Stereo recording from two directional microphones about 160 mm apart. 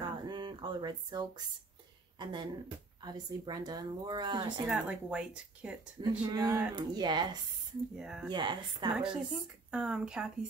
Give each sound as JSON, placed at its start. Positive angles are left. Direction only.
{"t": 0.0, "sound": "a sound", "side_deg": -30}
{"t": 2.1, "sound": "speech", "side_deg": -30}
{"t": 4.6, "sound": "speech", "side_deg": -5}
{"t": 5.9, "sound": "speech", "side_deg": -25}
{"t": 8.0, "sound": "speech", "side_deg": -5}
{"t": 8.3, "sound": "speech", "side_deg": -25}
{"t": 8.9, "sound": "speech", "side_deg": -5}